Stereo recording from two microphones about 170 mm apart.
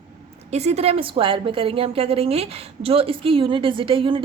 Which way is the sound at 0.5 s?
40° right (ahead or behind).